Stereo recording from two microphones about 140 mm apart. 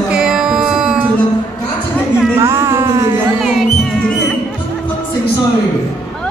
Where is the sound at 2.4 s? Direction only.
20° right (ahead or behind).